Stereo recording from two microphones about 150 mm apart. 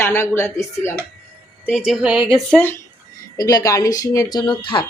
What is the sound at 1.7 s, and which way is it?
Speech, 5° right (ahead or behind).